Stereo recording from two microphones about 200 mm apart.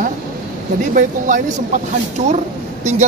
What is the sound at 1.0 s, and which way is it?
Speech, 40° right (ahead or behind).